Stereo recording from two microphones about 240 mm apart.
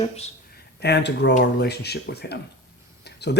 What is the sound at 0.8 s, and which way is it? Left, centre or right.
Speech, left.